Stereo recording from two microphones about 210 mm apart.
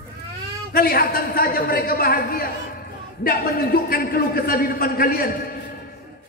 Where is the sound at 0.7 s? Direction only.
45° left (ahead or behind).